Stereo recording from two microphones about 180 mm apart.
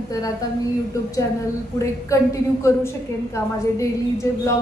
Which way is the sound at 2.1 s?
15° left (ahead or behind).